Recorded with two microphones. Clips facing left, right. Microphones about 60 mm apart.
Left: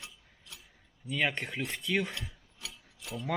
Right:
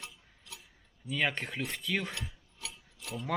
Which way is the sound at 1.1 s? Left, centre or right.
Centre.